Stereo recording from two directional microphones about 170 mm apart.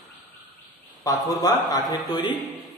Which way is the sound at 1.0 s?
25° left (ahead or behind).